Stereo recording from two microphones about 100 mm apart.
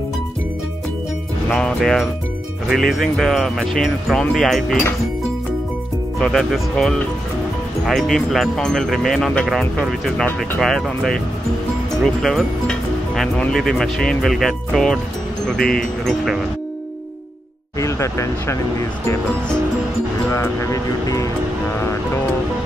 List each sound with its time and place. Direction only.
1.5 s speech: 5° left (ahead or behind)
6.1 s speech: 5° left (ahead or behind)
17.7 s speech: 30° left (ahead or behind)
20.2 s speech: 30° left (ahead or behind)
21.7 s music: 25° left (ahead or behind)